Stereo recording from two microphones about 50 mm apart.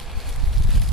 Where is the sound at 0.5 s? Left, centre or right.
Centre.